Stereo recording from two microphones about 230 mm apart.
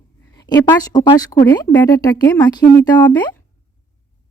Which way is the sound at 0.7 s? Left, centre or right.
Centre.